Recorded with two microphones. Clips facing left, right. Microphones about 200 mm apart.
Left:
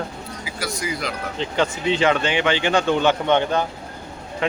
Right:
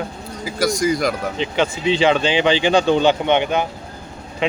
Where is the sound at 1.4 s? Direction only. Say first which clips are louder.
Right 1 dB; 70° right (ahead or behind).